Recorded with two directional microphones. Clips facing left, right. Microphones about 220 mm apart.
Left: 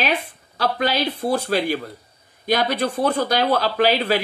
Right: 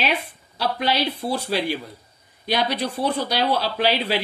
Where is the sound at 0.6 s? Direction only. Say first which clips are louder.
Left 2 dB; 50° left (ahead or behind).